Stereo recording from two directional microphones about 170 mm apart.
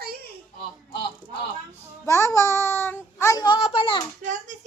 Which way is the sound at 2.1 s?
15° left (ahead or behind).